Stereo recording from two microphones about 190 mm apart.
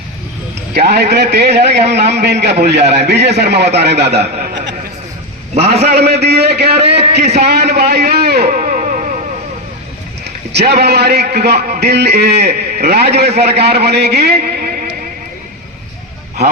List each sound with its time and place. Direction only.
0.7 s a man's voice: 60° right (ahead or behind)
5.9 s a man's voice: 60° right (ahead or behind); by 9.2 s 40° right (ahead or behind)
10.5 s a man's voice: 60° right (ahead or behind)